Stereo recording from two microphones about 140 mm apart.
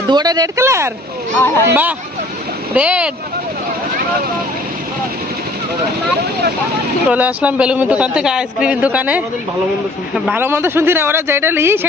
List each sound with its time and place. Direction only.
0.1 s speech: 30° right (ahead or behind)
1.4 s speech: 15° left (ahead or behind)
1.7 s speech: 10° right (ahead or behind)
7.1 s speech: 10° right (ahead or behind)
10.2 s speech: 15° right (ahead or behind)